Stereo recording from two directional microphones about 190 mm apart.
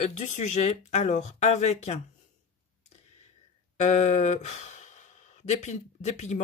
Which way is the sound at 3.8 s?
35° left (ahead or behind).